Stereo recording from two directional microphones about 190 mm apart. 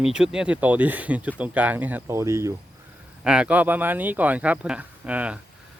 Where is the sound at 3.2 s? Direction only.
5° right (ahead or behind).